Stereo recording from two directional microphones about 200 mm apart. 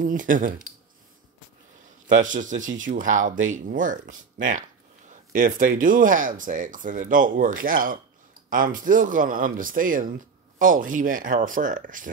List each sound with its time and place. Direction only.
0.0 s speech: 40° right (ahead or behind)
2.1 s speech: 40° right (ahead or behind)